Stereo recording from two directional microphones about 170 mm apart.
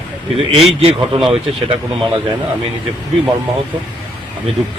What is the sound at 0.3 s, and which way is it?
Speech, 35° right (ahead or behind).